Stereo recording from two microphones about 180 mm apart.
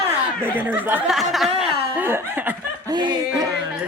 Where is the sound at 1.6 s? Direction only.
10° right (ahead or behind).